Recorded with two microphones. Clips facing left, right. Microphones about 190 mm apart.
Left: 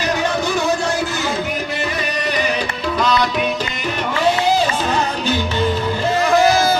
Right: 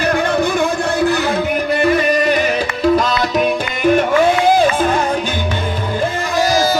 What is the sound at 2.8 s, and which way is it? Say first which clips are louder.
Music: right 4 dB; 45° right (ahead or behind).